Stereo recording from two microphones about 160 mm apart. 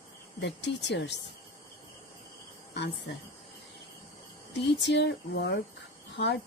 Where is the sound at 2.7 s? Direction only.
90° left.